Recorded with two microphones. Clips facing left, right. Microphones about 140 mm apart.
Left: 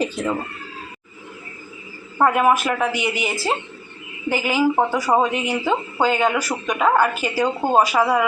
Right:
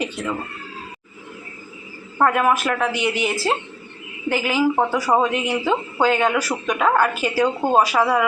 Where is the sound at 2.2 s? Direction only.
5° left (ahead or behind).